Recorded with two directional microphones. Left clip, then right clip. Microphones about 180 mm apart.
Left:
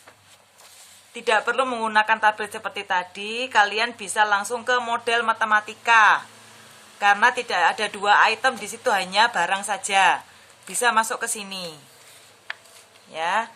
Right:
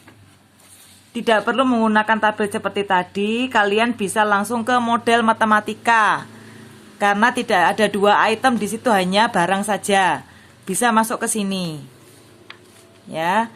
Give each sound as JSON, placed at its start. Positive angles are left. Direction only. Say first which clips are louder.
{"t": 1.1, "sound": "a woman's voice", "louder": "right 4 dB", "side_deg": -30}
{"t": 13.1, "sound": "speech", "louder": "right 5 dB", "side_deg": -25}